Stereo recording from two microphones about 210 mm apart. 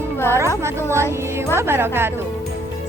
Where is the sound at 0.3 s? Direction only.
15° right (ahead or behind).